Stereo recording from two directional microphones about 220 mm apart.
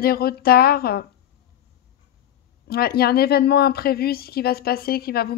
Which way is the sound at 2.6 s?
45° left (ahead or behind).